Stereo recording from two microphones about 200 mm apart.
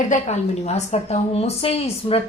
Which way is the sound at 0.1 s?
35° left (ahead or behind).